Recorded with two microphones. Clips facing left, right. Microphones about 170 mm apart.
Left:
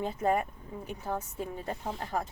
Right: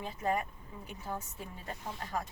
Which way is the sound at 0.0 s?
30° left (ahead or behind).